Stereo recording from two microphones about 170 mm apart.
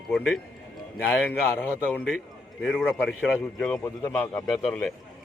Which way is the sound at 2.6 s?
Centre (ahead or behind).